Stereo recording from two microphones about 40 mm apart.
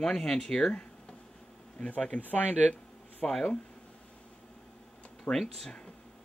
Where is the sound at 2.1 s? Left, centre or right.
Left.